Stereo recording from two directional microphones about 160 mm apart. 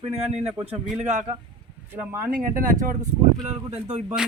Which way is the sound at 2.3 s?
60° right (ahead or behind).